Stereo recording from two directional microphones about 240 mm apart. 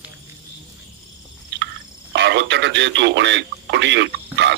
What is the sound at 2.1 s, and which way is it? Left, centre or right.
Speech, right.